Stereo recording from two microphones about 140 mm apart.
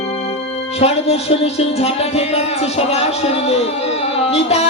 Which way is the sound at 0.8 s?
50° left (ahead or behind).